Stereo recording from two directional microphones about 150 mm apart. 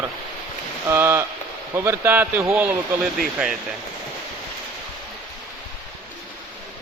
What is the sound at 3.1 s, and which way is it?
Speech, 5° right (ahead or behind).